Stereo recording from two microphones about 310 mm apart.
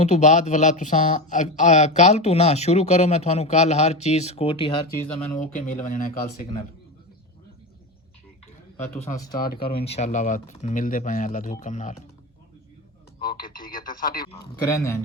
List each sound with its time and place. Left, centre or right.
0.0 s speech: left
5.9 s speech: left
9.0 s speech: centre
13.1 s speech: left
14.7 s speech: centre